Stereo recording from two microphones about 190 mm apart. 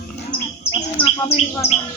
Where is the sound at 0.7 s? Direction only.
30° left (ahead or behind).